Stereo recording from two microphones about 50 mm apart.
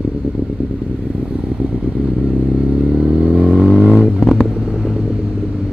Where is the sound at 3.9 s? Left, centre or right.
Centre.